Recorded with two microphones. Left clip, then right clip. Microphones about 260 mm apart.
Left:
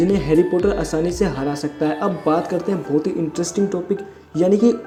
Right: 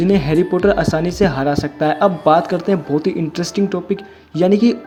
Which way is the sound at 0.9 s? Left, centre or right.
Right.